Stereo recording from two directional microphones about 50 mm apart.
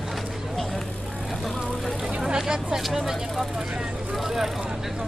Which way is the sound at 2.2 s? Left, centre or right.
Centre.